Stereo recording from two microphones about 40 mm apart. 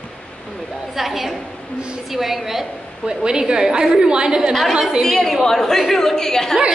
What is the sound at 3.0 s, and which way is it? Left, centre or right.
A woman's voice, centre.